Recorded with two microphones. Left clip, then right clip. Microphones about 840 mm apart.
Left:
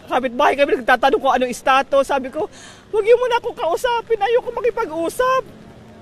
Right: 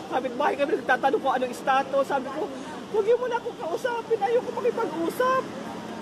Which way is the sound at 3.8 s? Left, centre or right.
Left.